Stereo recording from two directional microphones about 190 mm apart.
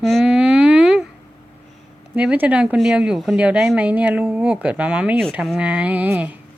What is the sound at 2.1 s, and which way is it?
A woman's voice, 5° right (ahead or behind).